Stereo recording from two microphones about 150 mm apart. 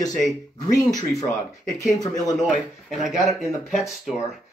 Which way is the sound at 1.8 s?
25° left (ahead or behind).